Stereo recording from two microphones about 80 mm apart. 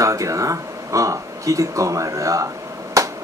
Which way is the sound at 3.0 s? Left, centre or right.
Right.